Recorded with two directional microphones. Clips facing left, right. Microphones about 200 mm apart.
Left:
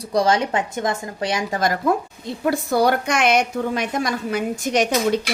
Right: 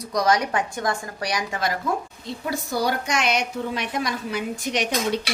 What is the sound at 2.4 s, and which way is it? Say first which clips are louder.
A woman's voice: left 7 dB; 55° left (ahead or behind).